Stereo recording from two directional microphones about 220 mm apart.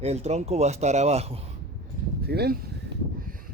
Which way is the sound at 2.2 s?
45° right (ahead or behind).